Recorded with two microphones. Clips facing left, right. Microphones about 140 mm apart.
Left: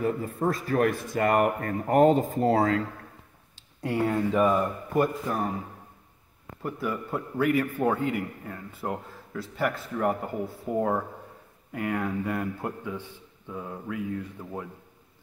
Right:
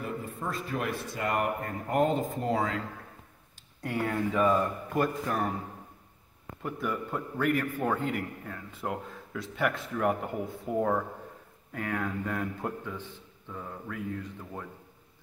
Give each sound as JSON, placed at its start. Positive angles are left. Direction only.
{"t": 0.0, "sound": "speech", "side_deg": 40}
{"t": 3.8, "sound": "a man's voice", "side_deg": 15}
{"t": 6.6, "sound": "a man's voice", "side_deg": 5}